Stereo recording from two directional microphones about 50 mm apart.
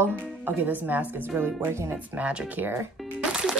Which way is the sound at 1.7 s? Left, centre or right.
Right.